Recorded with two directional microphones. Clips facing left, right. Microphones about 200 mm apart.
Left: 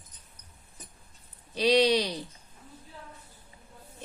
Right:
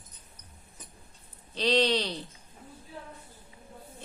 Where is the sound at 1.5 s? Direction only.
10° left (ahead or behind).